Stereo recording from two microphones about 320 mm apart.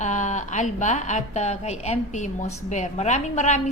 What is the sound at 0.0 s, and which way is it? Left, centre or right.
Speech, left.